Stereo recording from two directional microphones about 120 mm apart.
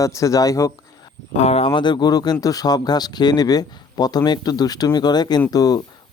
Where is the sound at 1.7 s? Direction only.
40° left (ahead or behind).